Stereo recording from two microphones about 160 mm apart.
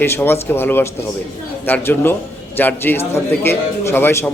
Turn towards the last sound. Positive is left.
turn(degrees=15)  # may be behind; listen again after turning